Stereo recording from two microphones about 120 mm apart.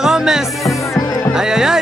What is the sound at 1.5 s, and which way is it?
Music, 5° right (ahead or behind).